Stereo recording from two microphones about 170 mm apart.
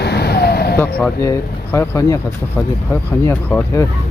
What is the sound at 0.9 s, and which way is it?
Speech, 10° left (ahead or behind).